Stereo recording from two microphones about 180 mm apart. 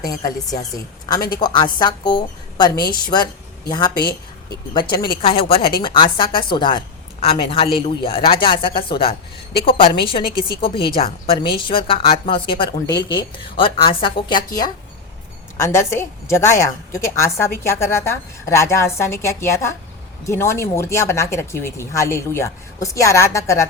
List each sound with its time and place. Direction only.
0.0 s a woman's voice: 20° left (ahead or behind)